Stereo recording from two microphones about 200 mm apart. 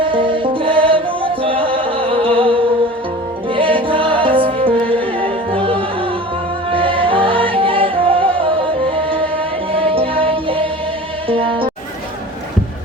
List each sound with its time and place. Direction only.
0.0 s music: 25° right (ahead or behind)
3.5 s music: 25° right (ahead or behind)
9.7 s music: 30° right (ahead or behind)